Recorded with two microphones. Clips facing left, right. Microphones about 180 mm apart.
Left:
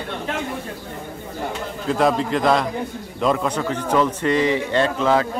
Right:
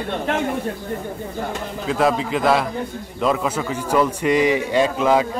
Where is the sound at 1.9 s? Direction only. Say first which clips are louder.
Left 1 dB; centre (ahead or behind).